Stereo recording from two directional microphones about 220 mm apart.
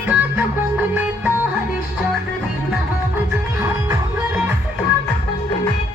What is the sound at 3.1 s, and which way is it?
Music, 10° right (ahead or behind).